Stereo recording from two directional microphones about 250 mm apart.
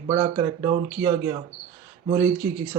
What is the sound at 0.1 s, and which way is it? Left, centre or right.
A man's voice, centre.